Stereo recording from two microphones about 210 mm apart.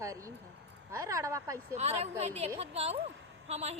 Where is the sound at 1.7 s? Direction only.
30° right (ahead or behind).